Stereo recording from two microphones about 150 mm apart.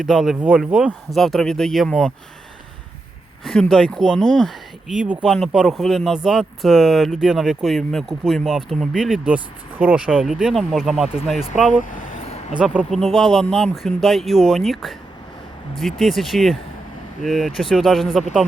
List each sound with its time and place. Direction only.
0.0 s speech: centre (ahead or behind)
3.4 s speech: 5° left (ahead or behind)
11.8 s a sound: 60° left (ahead or behind)
12.5 s speech: 5° right (ahead or behind)